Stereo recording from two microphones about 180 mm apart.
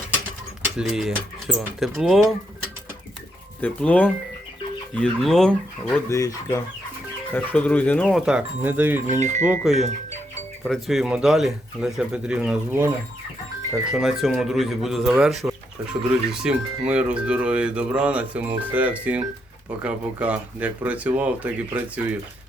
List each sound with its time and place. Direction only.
0.6 s speech: 5° right (ahead or behind)
3.6 s speech: 10° left (ahead or behind)
6.1 s speech: 15° left (ahead or behind)
8.1 s speech: 5° right (ahead or behind)
9.0 s speech: 40° right (ahead or behind)
9.5 s speech: centre (ahead or behind)
13.9 s speech: centre (ahead or behind)